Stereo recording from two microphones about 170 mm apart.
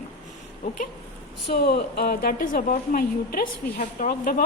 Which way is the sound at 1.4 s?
70° left (ahead or behind).